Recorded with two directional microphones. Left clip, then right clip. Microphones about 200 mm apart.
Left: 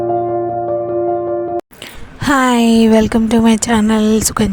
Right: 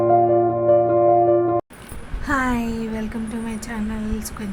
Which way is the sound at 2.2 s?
50° left (ahead or behind).